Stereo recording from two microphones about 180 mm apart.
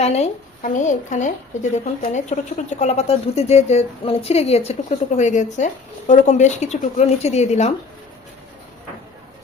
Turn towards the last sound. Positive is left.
turn(degrees=40)  # may be behind; listen again after turning